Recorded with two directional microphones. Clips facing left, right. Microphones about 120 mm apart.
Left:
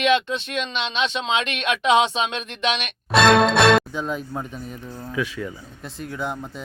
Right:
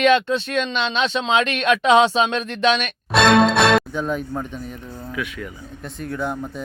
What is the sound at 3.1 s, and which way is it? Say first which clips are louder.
Speech: right 1 dB; centre (ahead or behind).